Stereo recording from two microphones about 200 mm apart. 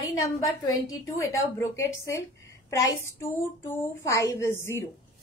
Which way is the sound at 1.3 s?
15° left (ahead or behind).